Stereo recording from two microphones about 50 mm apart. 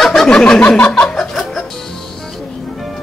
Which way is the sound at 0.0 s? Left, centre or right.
Centre.